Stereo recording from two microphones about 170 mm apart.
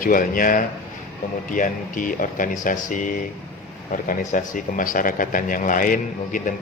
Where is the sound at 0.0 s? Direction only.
55° left (ahead or behind).